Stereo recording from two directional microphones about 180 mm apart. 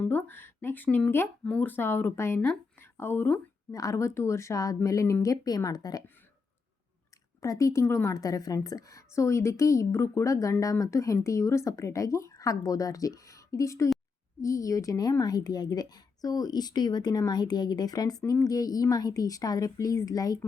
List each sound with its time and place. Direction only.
0.0 s a woman's voice: 10° left (ahead or behind)
7.4 s a woman's voice: 20° left (ahead or behind)